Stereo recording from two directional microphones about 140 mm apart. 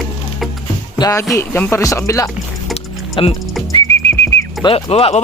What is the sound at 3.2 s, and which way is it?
Speech, 35° left (ahead or behind).